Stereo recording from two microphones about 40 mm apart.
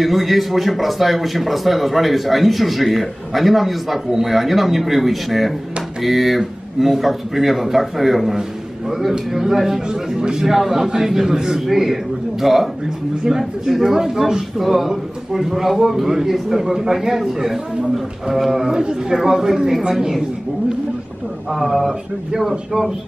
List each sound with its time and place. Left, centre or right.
0.0 s a man's voice: centre
9.8 s speech: centre
10.4 s a man's voice: centre
13.9 s a man's voice: centre
18.7 s a man's voice: centre
21.5 s a man's voice: centre